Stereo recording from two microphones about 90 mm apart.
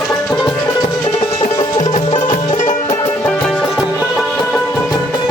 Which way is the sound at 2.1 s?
65° left (ahead or behind).